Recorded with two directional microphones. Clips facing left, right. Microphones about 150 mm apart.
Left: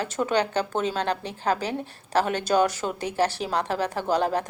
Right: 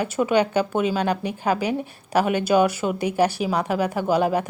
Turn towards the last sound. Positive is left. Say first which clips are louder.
# right 3 dB
turn(degrees=-10)  # may be behind; listen again after turning